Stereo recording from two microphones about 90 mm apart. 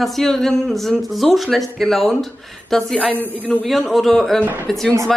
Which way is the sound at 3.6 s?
Centre (ahead or behind).